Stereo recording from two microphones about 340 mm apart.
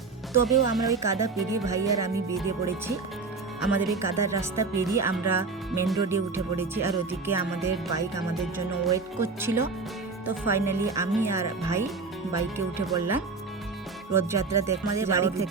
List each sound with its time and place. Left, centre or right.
0.4 s speech: centre
8.9 s speech: centre